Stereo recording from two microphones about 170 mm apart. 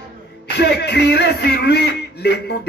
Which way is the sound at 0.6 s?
75° left (ahead or behind).